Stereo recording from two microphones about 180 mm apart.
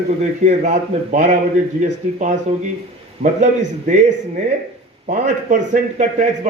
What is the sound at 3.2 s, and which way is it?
Speech, 30° right (ahead or behind).